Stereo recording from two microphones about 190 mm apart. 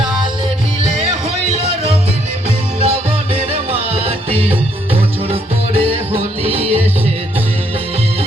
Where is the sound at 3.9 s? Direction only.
30° right (ahead or behind).